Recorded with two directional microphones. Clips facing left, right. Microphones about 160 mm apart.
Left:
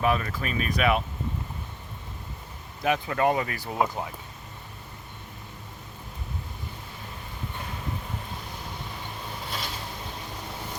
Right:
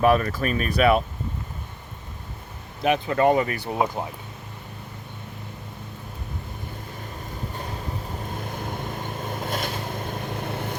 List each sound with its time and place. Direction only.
0.0 s speech: 45° right (ahead or behind)
3.1 s speech: 35° right (ahead or behind)
3.7 s speech: 20° right (ahead or behind)
8.4 s vehicle: 50° right (ahead or behind)